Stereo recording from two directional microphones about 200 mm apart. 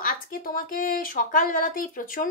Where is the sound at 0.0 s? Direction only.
45° left (ahead or behind).